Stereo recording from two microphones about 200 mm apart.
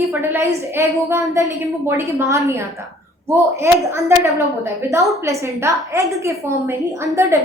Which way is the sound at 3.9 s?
15° right (ahead or behind).